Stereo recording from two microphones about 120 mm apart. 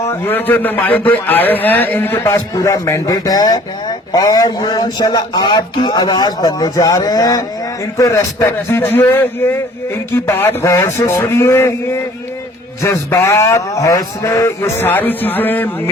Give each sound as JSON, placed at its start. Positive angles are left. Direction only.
{"t": 0.1, "sound": "a man's voice", "side_deg": 15}
{"t": 10.2, "sound": "a man's voice", "side_deg": 25}